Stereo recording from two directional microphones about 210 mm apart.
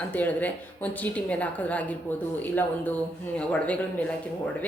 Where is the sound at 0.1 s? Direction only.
10° left (ahead or behind).